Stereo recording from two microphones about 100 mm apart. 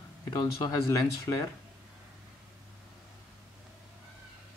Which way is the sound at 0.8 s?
35° left (ahead or behind).